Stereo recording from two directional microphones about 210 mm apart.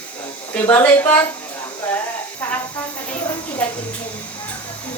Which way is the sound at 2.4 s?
10° left (ahead or behind).